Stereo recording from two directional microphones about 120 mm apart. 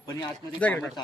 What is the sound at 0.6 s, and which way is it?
Speech, 15° left (ahead or behind).